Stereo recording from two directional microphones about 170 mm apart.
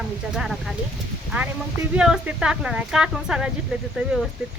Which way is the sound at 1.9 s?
5° right (ahead or behind).